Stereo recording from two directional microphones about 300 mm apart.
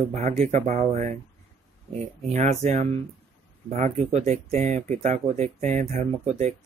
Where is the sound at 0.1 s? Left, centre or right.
Right.